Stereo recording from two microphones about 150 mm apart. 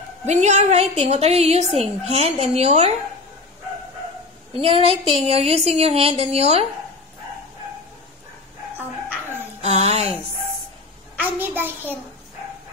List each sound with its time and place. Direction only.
0.3 s a woman's voice: 50° right (ahead or behind)
4.6 s speech: 40° right (ahead or behind)
9.6 s a sound: 45° right (ahead or behind)
11.2 s a child's voice: 15° right (ahead or behind)